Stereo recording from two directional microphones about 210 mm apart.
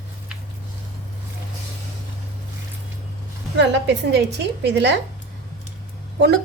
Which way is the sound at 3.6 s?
55° right (ahead or behind).